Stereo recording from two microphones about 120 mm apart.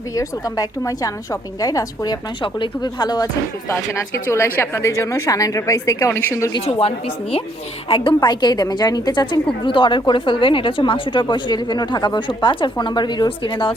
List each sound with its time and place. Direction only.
0.1 s a woman's voice: 30° left (ahead or behind)
2.4 s a woman's voice: 40° left (ahead or behind)
3.7 s a woman's voice: 25° left (ahead or behind)
6.7 s a woman's voice: 55° left (ahead or behind)